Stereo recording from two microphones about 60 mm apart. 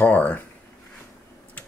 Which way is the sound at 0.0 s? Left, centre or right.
Left.